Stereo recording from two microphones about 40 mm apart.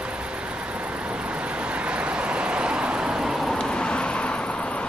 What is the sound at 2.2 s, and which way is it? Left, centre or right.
Vehicle, right.